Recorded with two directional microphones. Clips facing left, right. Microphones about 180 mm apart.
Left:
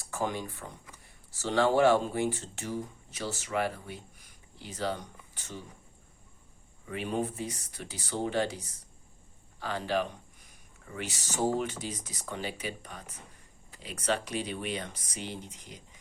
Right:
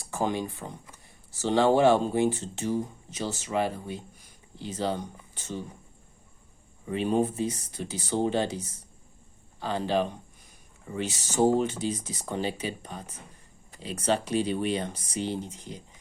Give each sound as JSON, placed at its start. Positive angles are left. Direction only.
{"t": 0.1, "sound": "speech", "side_deg": -25}
{"t": 6.8, "sound": "speech", "side_deg": -25}